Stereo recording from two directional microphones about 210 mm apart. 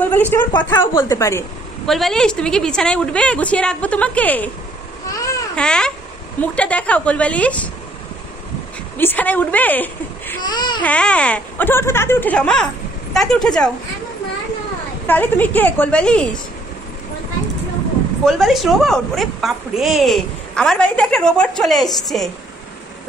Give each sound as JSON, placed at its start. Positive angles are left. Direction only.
{"t": 0.0, "sound": "speech", "side_deg": 10}
{"t": 1.9, "sound": "a woman's voice", "side_deg": 0}
{"t": 5.1, "sound": "babbling", "side_deg": 15}
{"t": 5.6, "sound": "a woman's voice", "side_deg": 5}
{"t": 8.9, "sound": "a woman's voice", "side_deg": 10}
{"t": 10.4, "sound": "baby cry", "side_deg": 20}
{"t": 10.8, "sound": "a woman's voice", "side_deg": 5}
{"t": 15.0, "sound": "speech", "side_deg": 10}
{"t": 18.2, "sound": "a woman's voice", "side_deg": 0}